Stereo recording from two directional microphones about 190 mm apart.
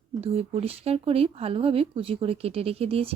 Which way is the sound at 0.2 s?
30° right (ahead or behind).